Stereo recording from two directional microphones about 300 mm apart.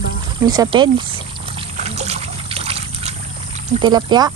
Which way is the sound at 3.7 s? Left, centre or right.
Centre.